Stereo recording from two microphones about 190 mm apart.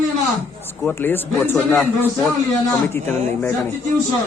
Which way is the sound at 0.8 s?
10° left (ahead or behind).